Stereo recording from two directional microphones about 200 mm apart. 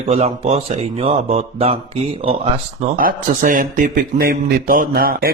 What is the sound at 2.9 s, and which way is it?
Speech, 45° right (ahead or behind).